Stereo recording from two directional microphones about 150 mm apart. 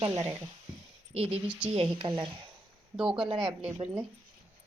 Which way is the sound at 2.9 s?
5° right (ahead or behind).